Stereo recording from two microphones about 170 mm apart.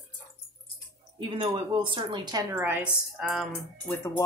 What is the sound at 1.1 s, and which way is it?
Speech, 30° right (ahead or behind).